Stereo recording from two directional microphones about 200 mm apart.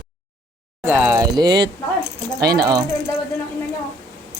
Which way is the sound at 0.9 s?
10° right (ahead or behind).